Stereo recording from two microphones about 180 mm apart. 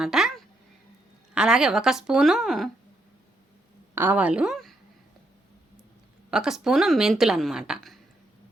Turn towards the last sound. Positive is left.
turn(degrees=0)  # may be behind; listen again after turning